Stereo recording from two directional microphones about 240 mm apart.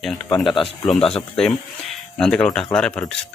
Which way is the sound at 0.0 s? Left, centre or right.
Centre.